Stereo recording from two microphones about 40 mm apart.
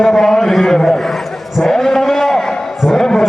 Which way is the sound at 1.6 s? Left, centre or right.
Centre.